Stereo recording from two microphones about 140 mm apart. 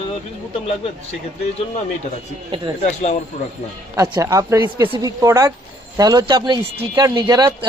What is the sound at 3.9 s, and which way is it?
Speech, 25° right (ahead or behind).